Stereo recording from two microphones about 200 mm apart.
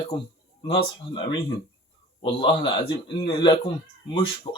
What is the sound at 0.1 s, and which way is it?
Speech, 25° left (ahead or behind).